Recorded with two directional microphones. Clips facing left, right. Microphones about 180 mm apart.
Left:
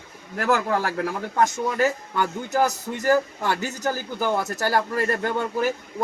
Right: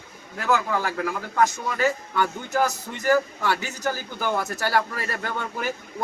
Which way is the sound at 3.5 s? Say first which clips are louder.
Left 2 dB; 45° left (ahead or behind).